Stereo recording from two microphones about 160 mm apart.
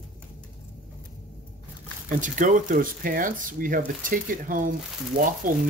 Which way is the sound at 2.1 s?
55° right (ahead or behind).